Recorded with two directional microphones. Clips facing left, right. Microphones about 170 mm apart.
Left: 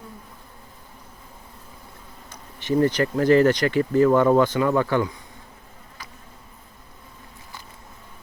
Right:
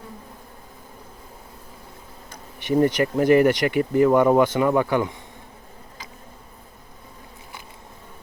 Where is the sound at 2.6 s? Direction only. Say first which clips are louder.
Right 1 dB; 15° right (ahead or behind).